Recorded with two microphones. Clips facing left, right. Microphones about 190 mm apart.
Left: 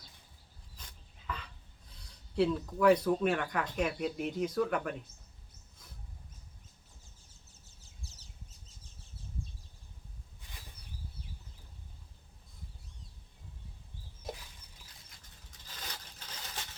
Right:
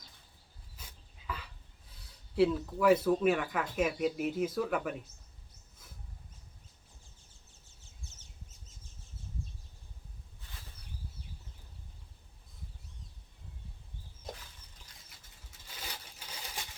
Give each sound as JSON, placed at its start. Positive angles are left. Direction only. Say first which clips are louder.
{"t": 0.8, "sound": "dog", "louder": "right 1 dB", "side_deg": -5}
{"t": 2.3, "sound": "speech", "louder": "right 2 dB", "side_deg": -5}
{"t": 7.8, "sound": "a sound", "louder": "left 1 dB", "side_deg": 35}
{"t": 15.4, "sound": "mechanisms", "louder": "right 1 dB", "side_deg": -10}